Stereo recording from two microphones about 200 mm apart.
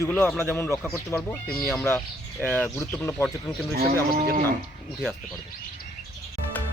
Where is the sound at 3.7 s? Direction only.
45° right (ahead or behind).